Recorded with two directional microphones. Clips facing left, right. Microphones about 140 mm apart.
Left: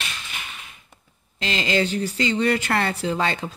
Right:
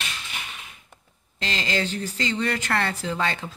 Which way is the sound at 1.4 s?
15° left (ahead or behind).